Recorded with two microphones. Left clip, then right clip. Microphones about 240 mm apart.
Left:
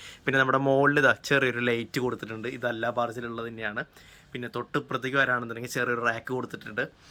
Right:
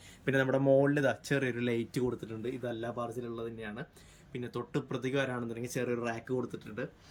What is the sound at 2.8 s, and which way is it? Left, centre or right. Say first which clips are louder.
Speech: left 12 dB; left.